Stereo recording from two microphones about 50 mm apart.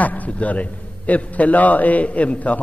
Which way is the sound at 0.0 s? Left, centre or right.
Left.